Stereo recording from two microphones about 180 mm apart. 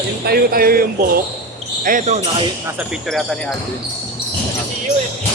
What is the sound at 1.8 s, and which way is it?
Speech, 50° right (ahead or behind).